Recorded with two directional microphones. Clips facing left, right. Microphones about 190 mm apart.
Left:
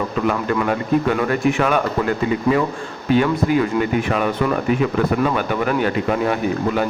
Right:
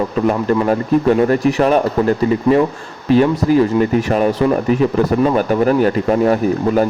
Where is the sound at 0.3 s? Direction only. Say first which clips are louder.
Right 5 dB; 30° right (ahead or behind).